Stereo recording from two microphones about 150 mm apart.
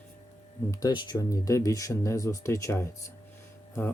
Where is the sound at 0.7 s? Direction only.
30° left (ahead or behind).